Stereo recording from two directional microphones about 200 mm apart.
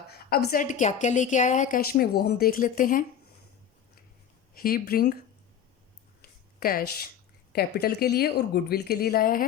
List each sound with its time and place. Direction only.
0.1 s a woman's voice: 50° left (ahead or behind)
4.5 s a woman's voice: 45° left (ahead or behind)
6.6 s a woman's voice: 45° left (ahead or behind)